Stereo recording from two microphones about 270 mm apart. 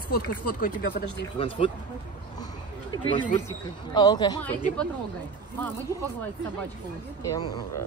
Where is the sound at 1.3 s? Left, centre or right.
Centre.